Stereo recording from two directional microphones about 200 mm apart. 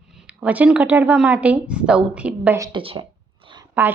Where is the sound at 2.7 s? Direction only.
25° right (ahead or behind).